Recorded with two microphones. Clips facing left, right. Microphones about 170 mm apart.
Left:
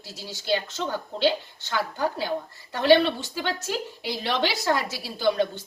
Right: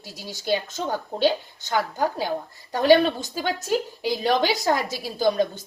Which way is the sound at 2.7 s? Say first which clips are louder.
Right 2 dB; 40° right (ahead or behind).